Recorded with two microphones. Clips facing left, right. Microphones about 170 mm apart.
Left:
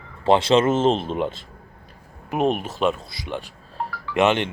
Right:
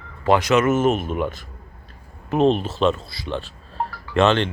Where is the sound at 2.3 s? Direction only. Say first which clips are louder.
Right 4 dB; 10° left (ahead or behind).